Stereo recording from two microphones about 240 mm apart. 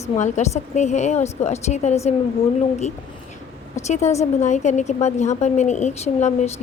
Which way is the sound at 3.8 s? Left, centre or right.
Left.